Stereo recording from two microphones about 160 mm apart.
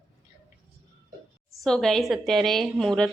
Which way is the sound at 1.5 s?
5° left (ahead or behind).